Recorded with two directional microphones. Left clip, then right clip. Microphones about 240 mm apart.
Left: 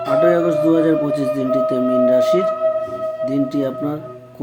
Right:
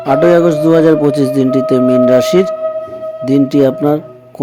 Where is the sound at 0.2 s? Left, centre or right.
Right.